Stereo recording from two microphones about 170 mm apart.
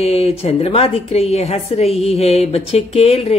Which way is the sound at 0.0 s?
35° left (ahead or behind).